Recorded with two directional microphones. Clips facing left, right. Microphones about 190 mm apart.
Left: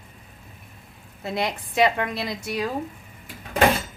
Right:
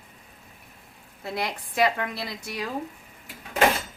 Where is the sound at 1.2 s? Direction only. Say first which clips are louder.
Left 4 dB; 20° left (ahead or behind).